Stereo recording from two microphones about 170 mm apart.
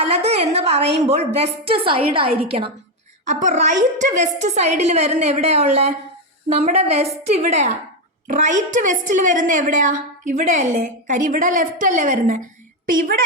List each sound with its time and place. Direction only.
0.0 s a woman's voice: 40° right (ahead or behind); by 13.2 s 55° right (ahead or behind)